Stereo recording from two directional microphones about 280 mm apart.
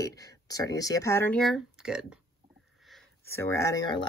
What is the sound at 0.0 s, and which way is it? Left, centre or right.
Speech, centre.